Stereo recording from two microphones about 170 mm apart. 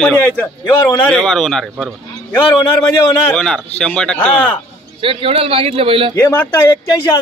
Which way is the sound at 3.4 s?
5° left (ahead or behind).